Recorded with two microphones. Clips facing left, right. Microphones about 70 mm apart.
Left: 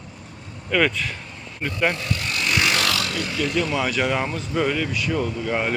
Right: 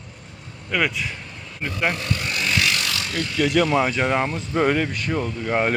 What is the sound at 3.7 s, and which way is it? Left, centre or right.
Speech, right.